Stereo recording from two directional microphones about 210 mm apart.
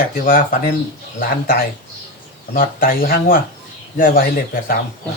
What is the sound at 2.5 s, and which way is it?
Speech, 45° left (ahead or behind).